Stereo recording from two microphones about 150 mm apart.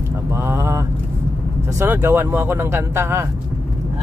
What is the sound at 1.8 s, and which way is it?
Speech, 15° right (ahead or behind).